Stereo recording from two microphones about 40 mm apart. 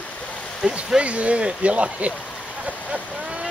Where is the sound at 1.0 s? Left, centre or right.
Right.